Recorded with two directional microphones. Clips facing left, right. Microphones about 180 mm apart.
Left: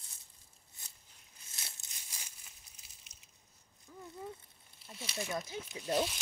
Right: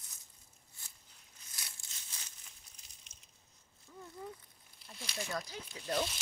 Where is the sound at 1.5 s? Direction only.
25° left (ahead or behind).